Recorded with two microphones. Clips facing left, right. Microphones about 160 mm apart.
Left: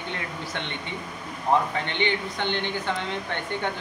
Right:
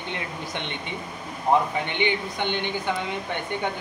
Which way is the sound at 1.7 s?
15° right (ahead or behind).